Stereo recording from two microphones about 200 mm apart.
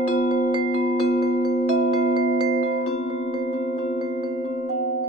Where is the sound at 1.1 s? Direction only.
55° left (ahead or behind).